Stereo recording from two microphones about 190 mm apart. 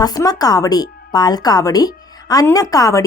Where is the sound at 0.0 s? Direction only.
20° left (ahead or behind).